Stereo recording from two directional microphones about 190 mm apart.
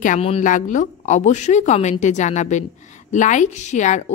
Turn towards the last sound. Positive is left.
turn(degrees=40)  # may be behind; listen again after turning